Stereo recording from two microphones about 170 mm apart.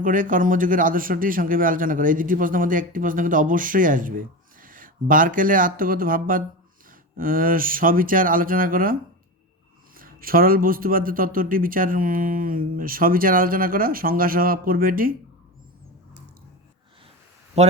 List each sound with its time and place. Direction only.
0.0 s a man's voice: 50° right (ahead or behind)
10.0 s a man's voice: 60° right (ahead or behind)